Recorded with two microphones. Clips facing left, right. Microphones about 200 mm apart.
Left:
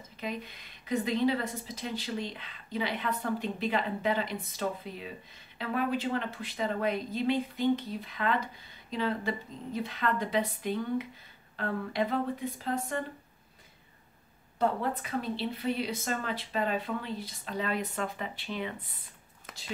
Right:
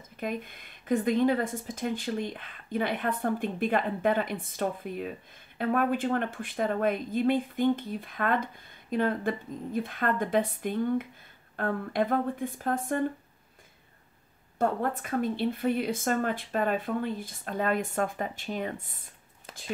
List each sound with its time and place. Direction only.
0.2 s speech: 50° right (ahead or behind)
14.6 s speech: 50° right (ahead or behind)